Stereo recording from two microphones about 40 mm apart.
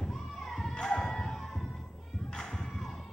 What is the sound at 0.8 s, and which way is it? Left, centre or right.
Music, centre.